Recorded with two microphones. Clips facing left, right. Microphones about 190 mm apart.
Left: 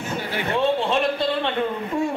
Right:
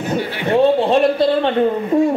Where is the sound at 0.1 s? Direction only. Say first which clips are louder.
Right 8 dB; 40° right (ahead or behind).